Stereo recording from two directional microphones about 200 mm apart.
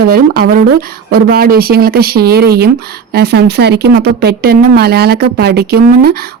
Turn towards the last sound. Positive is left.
turn(degrees=-50)  # may be behind; listen again after turning